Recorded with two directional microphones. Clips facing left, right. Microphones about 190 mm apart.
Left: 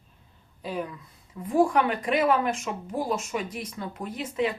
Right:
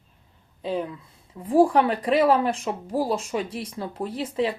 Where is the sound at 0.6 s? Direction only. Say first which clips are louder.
Right 4 dB; 25° right (ahead or behind).